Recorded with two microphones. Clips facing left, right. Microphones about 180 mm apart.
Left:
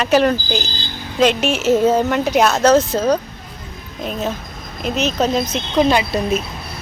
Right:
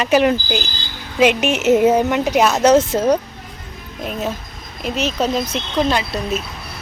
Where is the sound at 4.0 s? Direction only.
5° right (ahead or behind).